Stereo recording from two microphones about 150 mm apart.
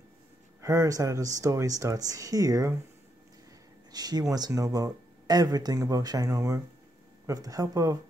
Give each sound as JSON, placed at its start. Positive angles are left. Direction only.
{"t": 0.6, "sound": "speech", "side_deg": -20}
{"t": 3.9, "sound": "speech", "side_deg": -25}